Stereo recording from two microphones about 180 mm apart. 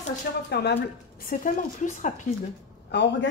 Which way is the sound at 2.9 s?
70° left (ahead or behind).